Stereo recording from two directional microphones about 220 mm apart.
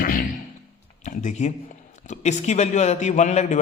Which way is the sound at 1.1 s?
35° left (ahead or behind).